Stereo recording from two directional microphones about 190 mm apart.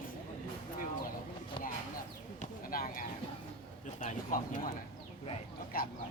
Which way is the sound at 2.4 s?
45° left (ahead or behind).